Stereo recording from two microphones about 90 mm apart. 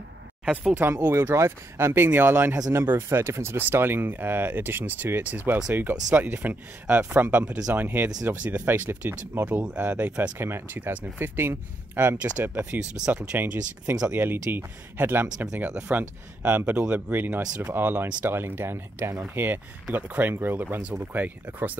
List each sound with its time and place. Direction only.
0.7 s speech: 20° right (ahead or behind)
15.3 s speech: 10° right (ahead or behind)